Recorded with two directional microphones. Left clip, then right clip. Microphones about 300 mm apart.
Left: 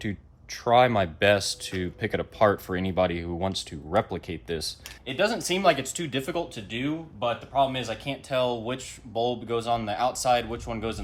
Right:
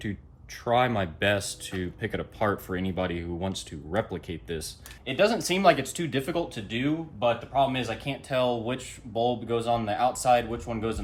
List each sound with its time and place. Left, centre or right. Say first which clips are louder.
0.0 s speech: left 2 dB; left
5.0 s speech: right 2 dB; centre